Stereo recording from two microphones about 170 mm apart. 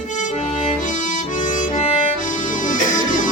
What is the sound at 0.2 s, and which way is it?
Accordion, 45° left (ahead or behind).